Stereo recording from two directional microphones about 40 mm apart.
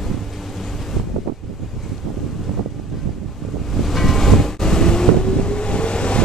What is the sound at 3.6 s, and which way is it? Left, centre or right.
Boat, centre.